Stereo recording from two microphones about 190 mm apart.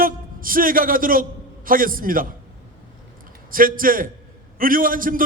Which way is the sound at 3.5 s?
50° right (ahead or behind).